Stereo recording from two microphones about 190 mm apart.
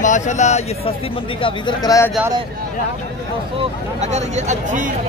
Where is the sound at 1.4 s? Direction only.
25° left (ahead or behind).